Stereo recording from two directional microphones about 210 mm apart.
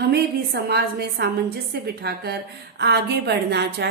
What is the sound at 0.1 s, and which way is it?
A woman's voice, 50° right (ahead or behind).